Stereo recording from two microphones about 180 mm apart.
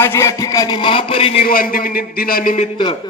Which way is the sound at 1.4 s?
55° left (ahead or behind).